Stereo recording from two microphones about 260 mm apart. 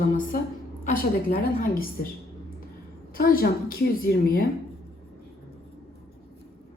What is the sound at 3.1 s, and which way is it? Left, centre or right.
A woman's voice, left.